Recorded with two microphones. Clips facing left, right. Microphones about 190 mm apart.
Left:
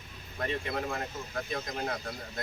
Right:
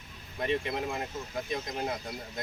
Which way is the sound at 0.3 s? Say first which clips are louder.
Right 2 dB; 15° right (ahead or behind).